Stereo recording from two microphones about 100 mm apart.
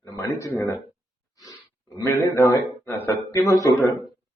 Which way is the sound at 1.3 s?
40° left (ahead or behind).